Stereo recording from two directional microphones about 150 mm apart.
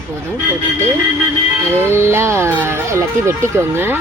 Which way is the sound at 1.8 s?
15° right (ahead or behind).